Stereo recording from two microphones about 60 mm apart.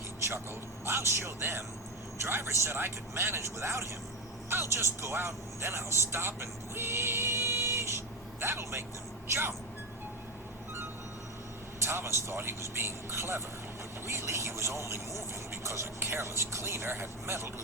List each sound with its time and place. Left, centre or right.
0.9 s a man's voice: right
11.8 s speech: right